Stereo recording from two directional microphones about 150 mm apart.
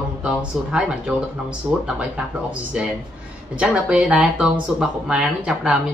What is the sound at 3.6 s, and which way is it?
Speech, 5° right (ahead or behind).